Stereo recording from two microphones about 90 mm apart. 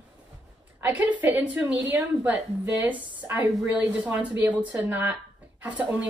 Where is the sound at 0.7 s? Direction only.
20° right (ahead or behind).